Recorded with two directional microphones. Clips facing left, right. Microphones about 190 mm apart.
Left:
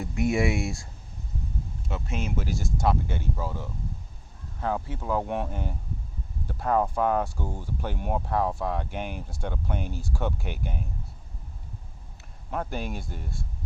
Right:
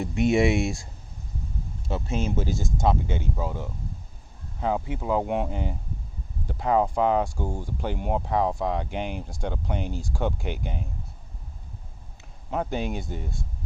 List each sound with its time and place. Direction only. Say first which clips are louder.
0.0 s speech: right 4 dB; 25° right (ahead or behind)
1.9 s speech: right 5 dB; 30° right (ahead or behind)
12.5 s speech: right 4 dB; 20° right (ahead or behind)